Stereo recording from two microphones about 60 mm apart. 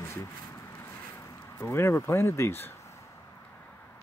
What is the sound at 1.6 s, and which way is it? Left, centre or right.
Speech, left.